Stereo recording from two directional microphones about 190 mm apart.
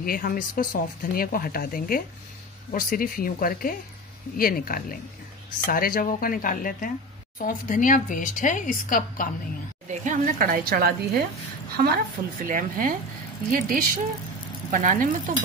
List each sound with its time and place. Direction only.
0.0 s speech: 50° left (ahead or behind)
9.8 s a woman's voice: 40° right (ahead or behind)